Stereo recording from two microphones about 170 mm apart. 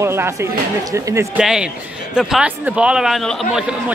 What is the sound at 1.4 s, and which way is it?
A man's voice, 5° right (ahead or behind).